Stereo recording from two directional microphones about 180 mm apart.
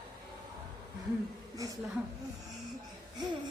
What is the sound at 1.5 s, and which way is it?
Speech, 20° right (ahead or behind).